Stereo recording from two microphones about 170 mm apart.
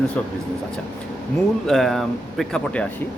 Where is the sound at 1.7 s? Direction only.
Centre (ahead or behind).